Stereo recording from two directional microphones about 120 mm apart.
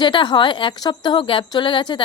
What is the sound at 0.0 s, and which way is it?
A woman's voice, 40° left (ahead or behind).